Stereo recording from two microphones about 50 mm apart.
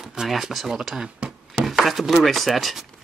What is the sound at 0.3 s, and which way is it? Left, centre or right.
Speech, centre.